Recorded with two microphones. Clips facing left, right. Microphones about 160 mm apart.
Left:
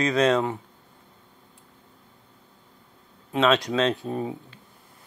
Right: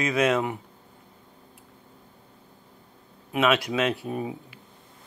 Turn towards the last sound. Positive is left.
turn(degrees=-15)  # may be behind; listen again after turning